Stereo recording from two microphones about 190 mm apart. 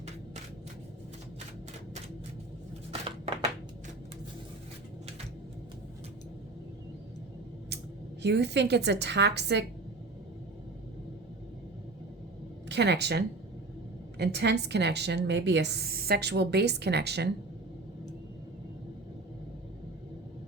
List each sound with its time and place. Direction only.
8.2 s a woman's voice: 65° right (ahead or behind)
12.6 s a woman's voice: 65° right (ahead or behind)